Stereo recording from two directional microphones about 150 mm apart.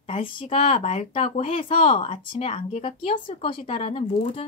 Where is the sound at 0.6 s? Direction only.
50° left (ahead or behind).